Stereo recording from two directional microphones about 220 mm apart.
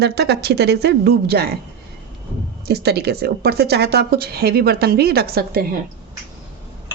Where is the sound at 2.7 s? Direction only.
45° right (ahead or behind).